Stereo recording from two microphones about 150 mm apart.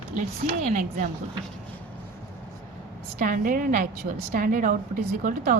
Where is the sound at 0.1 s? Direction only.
55° right (ahead or behind).